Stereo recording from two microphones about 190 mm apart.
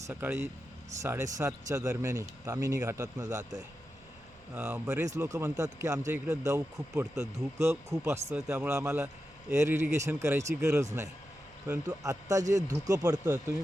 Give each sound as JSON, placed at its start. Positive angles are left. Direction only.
{"t": 0.1, "sound": "speech", "side_deg": -10}
{"t": 4.5, "sound": "speech", "side_deg": -10}